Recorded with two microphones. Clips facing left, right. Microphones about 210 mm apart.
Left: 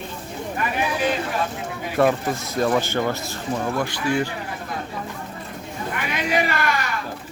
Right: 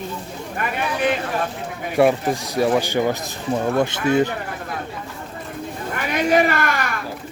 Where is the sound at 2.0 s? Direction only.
15° right (ahead or behind).